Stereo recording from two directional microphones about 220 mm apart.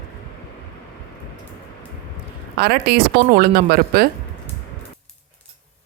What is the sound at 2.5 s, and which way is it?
Speech, 45° right (ahead or behind).